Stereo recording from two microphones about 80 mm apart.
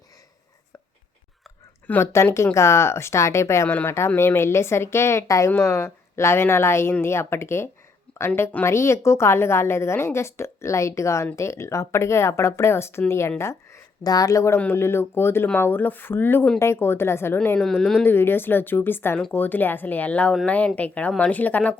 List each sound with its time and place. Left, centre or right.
1.9 s speech: centre
2.3 s a woman's voice: left
14.0 s speech: left
14.6 s a woman's voice: left
17.6 s speech: centre
18.0 s speech: left